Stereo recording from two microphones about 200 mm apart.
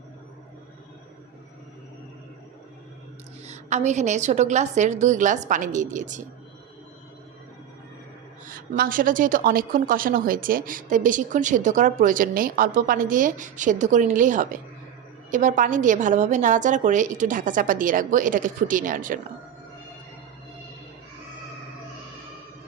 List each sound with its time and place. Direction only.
3.4 s a woman's voice: 35° right (ahead or behind)
8.4 s a woman's voice: 45° right (ahead or behind)